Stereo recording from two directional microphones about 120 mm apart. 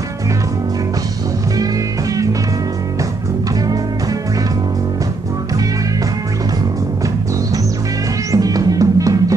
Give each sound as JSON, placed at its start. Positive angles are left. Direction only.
{"t": 8.3, "sound": "music", "side_deg": -30}